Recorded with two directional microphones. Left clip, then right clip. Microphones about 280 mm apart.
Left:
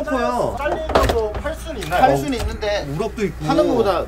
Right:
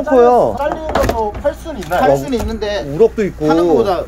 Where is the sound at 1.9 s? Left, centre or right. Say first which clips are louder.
Right 3 dB; right.